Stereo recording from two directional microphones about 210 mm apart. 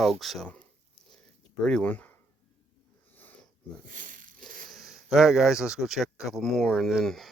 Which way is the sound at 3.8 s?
40° right (ahead or behind).